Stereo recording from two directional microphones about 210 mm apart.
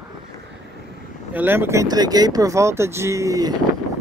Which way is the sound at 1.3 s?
10° right (ahead or behind).